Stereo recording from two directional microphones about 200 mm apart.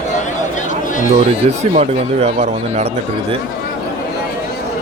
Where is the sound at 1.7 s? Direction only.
35° right (ahead or behind).